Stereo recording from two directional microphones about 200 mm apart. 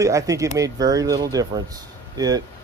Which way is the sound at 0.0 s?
15° right (ahead or behind).